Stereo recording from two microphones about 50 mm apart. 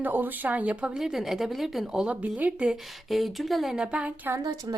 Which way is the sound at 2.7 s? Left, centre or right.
Centre.